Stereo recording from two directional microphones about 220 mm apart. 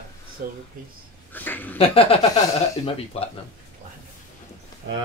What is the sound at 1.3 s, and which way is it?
Speech, 10° left (ahead or behind).